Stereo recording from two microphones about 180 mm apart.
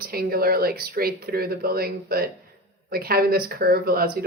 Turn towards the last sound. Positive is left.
turn(degrees=-55)  # may be behind; listen again after turning